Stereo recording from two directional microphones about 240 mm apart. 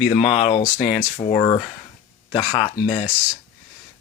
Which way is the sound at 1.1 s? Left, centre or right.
Left.